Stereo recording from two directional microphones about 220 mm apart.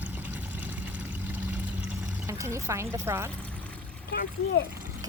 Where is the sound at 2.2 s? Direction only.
15° right (ahead or behind).